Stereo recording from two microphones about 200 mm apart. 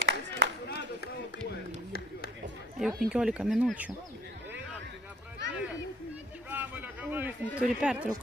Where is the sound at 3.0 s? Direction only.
5° right (ahead or behind).